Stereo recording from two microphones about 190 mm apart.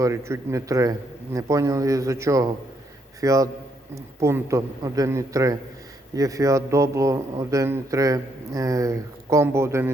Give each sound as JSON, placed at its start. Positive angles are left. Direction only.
{"t": 0.0, "sound": "a man's voice", "side_deg": -15}